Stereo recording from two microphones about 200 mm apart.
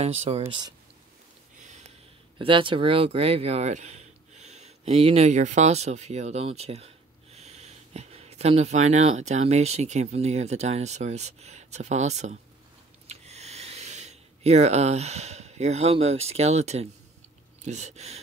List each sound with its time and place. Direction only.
0.0 s speech: 30° right (ahead or behind)
0.5 s speech: 20° right (ahead or behind)
2.3 s speech: 25° right (ahead or behind)
13.0 s a sound: 35° right (ahead or behind)
17.6 s speech: 35° right (ahead or behind)